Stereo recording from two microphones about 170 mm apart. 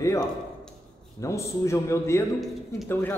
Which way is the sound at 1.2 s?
15° left (ahead or behind).